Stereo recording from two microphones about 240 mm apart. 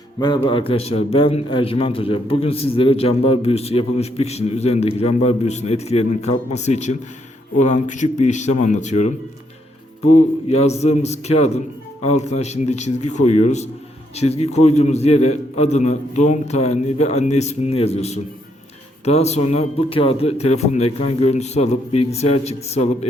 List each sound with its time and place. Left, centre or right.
0.2 s a man's voice: centre
10.5 s a man's voice: left